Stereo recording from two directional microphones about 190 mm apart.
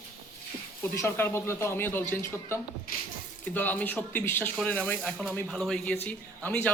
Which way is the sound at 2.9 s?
50° left (ahead or behind).